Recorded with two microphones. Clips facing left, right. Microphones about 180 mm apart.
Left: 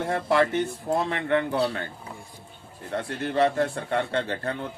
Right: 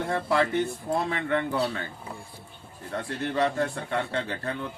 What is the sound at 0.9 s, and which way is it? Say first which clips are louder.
Speech: left 3 dB; 45° left (ahead or behind).